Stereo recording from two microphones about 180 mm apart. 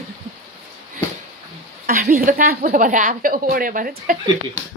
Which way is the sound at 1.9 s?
50° right (ahead or behind).